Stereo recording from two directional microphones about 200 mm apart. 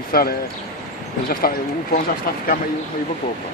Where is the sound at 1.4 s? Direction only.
50° left (ahead or behind).